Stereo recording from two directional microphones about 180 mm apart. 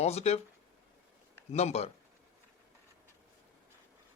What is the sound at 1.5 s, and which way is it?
Speech, 35° left (ahead or behind).